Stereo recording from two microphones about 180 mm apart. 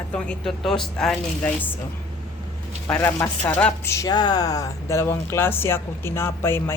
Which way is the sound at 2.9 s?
15° left (ahead or behind).